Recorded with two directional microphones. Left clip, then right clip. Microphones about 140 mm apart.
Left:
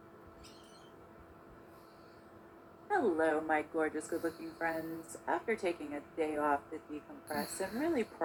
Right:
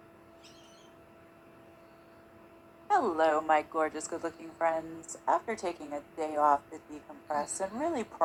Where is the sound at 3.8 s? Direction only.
15° left (ahead or behind).